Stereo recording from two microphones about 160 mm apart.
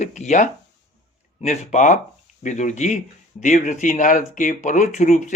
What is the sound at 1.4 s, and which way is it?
Speech, 50° left (ahead or behind).